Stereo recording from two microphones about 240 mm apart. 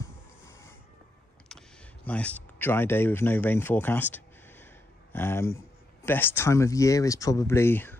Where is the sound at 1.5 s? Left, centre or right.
Centre.